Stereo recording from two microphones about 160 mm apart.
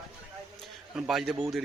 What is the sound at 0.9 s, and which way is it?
Speech, 5° right (ahead or behind).